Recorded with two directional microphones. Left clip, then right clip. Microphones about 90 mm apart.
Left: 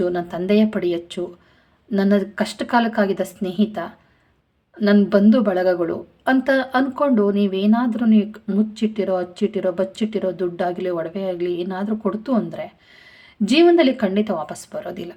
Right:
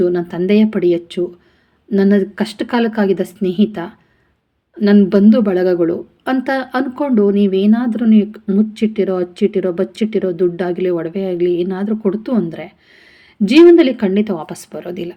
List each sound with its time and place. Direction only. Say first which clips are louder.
0.0 s a woman's voice: right 6 dB; 15° right (ahead or behind)